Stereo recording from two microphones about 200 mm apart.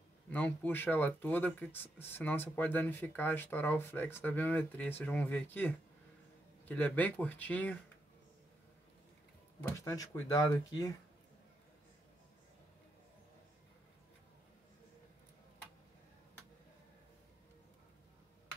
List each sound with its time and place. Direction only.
0.3 s speech: 10° left (ahead or behind)
9.6 s speech: 15° left (ahead or behind)